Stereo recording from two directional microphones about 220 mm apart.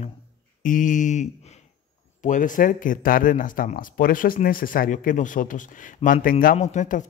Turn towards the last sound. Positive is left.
turn(degrees=35)  # may be behind; listen again after turning